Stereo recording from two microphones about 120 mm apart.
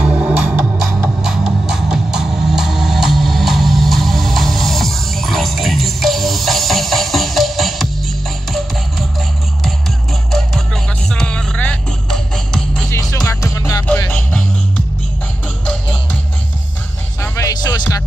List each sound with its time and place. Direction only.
0.0 s music: 10° right (ahead or behind)
11.1 s music: 5° left (ahead or behind)
13.1 s music: 30° left (ahead or behind)
13.9 s music: 15° left (ahead or behind)
15.6 s music: 10° left (ahead or behind)
17.2 s music: 25° left (ahead or behind)